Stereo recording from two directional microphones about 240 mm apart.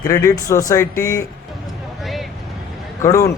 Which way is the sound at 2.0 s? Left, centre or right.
Centre.